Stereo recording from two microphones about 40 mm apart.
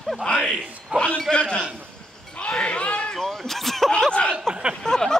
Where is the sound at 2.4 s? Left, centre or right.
Left.